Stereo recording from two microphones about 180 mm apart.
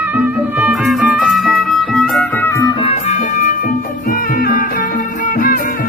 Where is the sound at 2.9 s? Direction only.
40° left (ahead or behind).